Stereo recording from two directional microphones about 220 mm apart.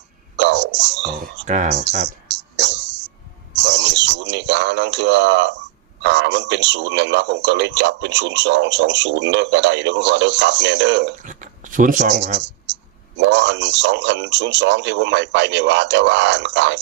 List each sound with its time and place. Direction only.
0.3 s speech: 55° right (ahead or behind)
1.5 s speech: 35° right (ahead or behind)
2.2 s music: 55° right (ahead or behind)
3.5 s a sound: 55° right (ahead or behind)
6.0 s a man's voice: 55° right (ahead or behind)
11.2 s speech: 35° right (ahead or behind)
13.1 s a man's voice: 55° right (ahead or behind)